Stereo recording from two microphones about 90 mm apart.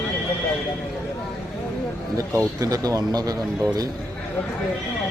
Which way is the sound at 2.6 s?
40° right (ahead or behind).